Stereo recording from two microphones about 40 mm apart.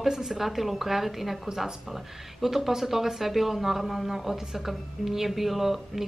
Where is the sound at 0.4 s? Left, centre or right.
Centre.